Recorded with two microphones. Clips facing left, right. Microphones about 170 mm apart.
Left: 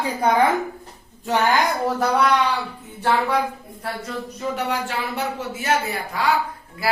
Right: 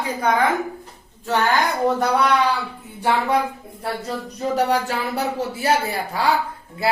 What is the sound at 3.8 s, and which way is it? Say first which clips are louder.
Speech: right 3 dB; 35° right (ahead or behind).